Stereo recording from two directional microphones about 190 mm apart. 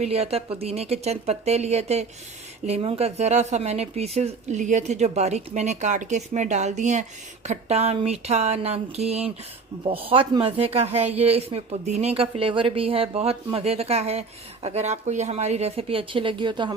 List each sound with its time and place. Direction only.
0.0 s speech: 35° right (ahead or behind)